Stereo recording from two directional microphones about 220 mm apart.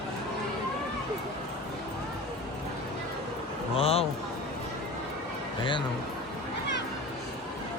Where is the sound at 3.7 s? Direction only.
25° left (ahead or behind).